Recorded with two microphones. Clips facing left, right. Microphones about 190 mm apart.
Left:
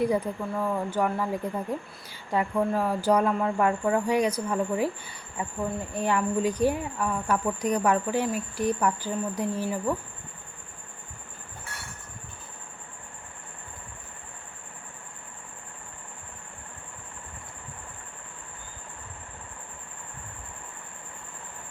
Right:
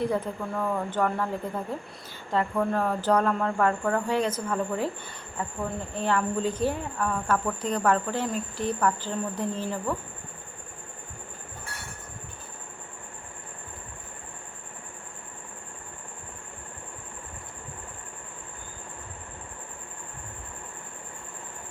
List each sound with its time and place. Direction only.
0.1 s a woman's voice: 10° left (ahead or behind)